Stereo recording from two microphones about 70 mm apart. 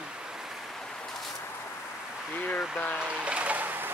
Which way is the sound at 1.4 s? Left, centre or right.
Left.